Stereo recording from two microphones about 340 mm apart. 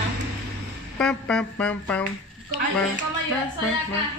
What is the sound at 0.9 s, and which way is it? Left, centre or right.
Speech, centre.